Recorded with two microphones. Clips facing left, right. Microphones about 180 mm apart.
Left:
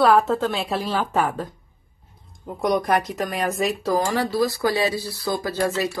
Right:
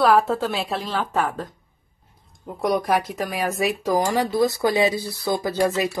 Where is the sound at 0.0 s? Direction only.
Centre (ahead or behind).